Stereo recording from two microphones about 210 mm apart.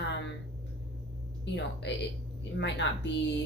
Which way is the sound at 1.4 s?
55° left (ahead or behind).